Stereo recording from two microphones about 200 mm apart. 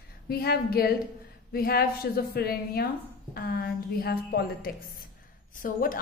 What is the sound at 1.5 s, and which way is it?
A woman's voice, 50° left (ahead or behind).